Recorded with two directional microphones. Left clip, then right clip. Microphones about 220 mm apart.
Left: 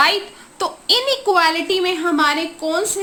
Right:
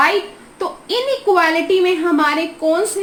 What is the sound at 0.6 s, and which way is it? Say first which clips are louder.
A woman's voice: left 2 dB; 25° left (ahead or behind).